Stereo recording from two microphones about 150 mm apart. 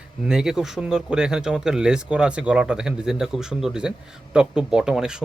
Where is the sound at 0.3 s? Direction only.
5° right (ahead or behind).